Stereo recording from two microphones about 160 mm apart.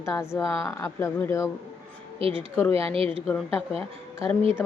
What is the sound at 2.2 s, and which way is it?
Speech, 35° right (ahead or behind).